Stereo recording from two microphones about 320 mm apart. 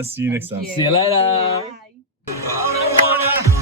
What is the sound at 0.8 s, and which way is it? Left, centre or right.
Speech, centre.